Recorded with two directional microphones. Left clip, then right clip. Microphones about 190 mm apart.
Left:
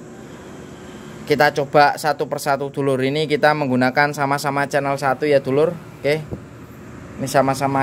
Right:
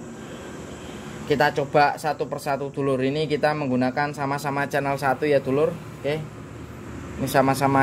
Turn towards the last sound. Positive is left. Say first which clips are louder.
# left 2 dB
turn(degrees=5)  # may be behind; listen again after turning